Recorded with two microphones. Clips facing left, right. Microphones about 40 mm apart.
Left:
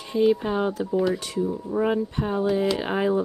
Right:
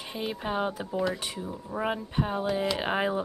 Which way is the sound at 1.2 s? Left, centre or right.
Centre.